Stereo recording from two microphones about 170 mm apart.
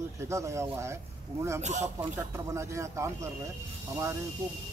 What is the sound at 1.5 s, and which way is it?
Speech, 40° right (ahead or behind).